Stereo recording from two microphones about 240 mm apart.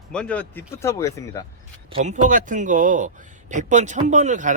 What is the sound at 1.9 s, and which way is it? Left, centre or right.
A man's voice, right.